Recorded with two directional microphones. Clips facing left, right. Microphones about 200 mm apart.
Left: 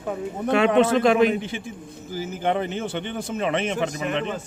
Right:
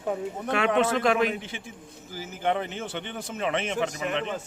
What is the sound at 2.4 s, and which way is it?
A man's voice, 30° left (ahead or behind).